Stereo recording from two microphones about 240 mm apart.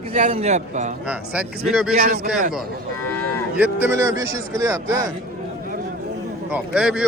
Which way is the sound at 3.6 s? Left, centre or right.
Centre.